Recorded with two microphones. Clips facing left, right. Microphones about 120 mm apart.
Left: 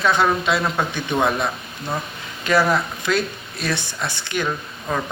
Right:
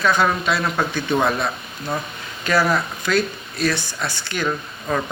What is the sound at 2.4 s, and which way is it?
Speech, 20° left (ahead or behind).